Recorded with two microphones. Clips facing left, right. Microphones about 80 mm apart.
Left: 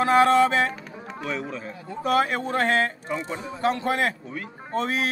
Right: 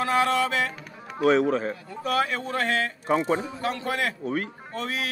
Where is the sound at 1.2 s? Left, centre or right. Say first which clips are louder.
Right 11 dB; right.